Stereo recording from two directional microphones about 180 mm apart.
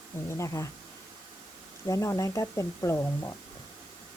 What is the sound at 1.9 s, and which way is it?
Speech, 15° left (ahead or behind).